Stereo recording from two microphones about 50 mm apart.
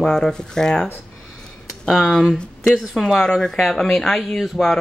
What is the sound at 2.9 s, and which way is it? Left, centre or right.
Speech, centre.